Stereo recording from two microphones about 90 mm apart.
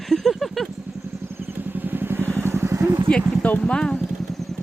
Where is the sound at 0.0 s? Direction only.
Centre (ahead or behind).